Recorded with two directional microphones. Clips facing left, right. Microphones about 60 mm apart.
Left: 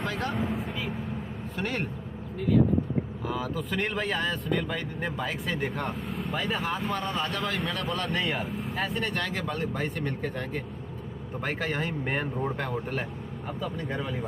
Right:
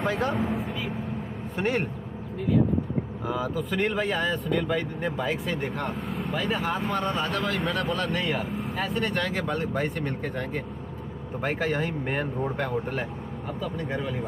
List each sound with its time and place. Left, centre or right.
0.3 s speech: centre
1.6 s speech: centre
3.3 s speech: centre